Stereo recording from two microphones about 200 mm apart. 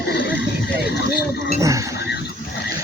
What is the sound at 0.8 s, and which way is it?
Speech, 50° left (ahead or behind).